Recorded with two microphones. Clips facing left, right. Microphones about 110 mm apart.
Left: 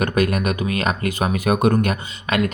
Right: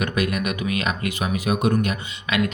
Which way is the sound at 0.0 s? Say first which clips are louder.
Left 4 dB; 45° left (ahead or behind).